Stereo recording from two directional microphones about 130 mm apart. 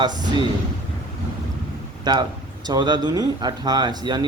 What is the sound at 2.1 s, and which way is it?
Speech, 30° right (ahead or behind).